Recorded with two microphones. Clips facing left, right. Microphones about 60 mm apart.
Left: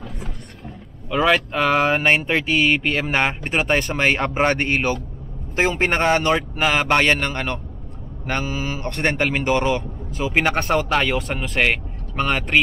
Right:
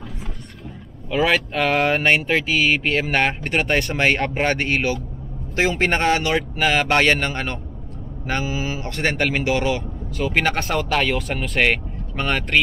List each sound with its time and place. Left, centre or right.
1.1 s speech: centre
6.3 s speech: centre